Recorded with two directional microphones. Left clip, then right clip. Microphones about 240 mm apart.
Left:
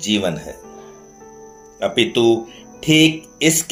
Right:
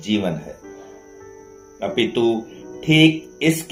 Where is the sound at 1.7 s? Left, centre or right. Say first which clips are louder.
Left 3 dB; left.